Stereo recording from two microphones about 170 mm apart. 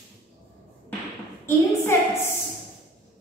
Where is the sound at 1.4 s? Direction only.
15° left (ahead or behind).